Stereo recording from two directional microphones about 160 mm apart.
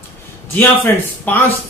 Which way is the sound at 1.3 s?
10° left (ahead or behind).